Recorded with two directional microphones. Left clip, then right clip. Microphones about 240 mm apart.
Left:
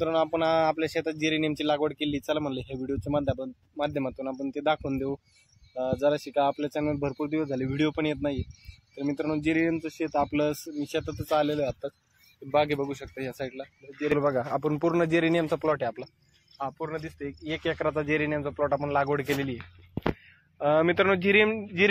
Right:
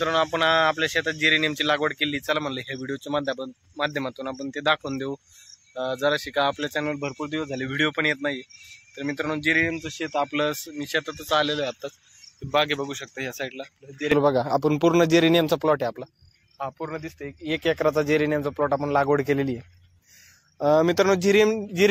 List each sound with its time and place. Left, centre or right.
0.0 s speech: centre
14.0 s speech: right
16.5 s speech: centre
17.5 s speech: right